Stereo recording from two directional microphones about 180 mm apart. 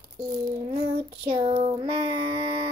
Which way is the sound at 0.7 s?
30° right (ahead or behind).